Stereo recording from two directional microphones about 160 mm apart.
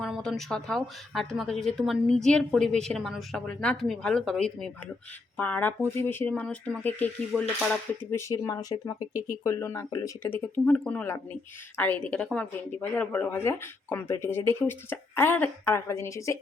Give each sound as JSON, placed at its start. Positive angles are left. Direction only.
{"t": 0.0, "sound": "speech", "side_deg": 5}